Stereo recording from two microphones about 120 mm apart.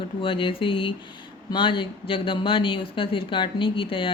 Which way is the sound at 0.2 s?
45° left (ahead or behind).